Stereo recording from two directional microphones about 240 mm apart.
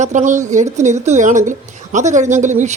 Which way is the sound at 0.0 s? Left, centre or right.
Right.